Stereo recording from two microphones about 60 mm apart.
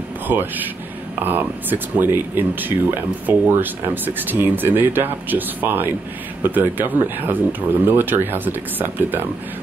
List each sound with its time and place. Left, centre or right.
1.2 s speech: right